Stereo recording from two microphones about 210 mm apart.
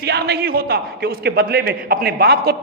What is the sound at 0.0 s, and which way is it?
A man's voice, 50° right (ahead or behind).